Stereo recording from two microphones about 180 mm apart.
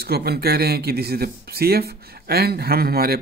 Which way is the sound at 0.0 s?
60° right (ahead or behind).